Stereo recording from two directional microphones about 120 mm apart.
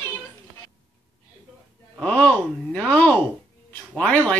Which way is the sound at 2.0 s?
10° left (ahead or behind).